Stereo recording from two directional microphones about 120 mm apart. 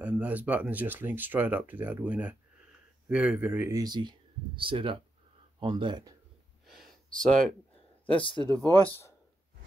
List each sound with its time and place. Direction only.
0.0 s speech: 10° right (ahead or behind)
3.7 s speech: 35° right (ahead or behind)
6.7 s a sound: centre (ahead or behind)
8.1 s speech: 45° left (ahead or behind)
8.4 s speech: 35° right (ahead or behind)